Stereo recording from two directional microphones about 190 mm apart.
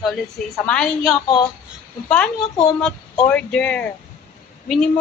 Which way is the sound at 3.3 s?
5° left (ahead or behind).